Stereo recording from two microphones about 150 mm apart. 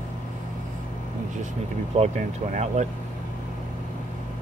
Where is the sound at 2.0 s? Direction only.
50° right (ahead or behind).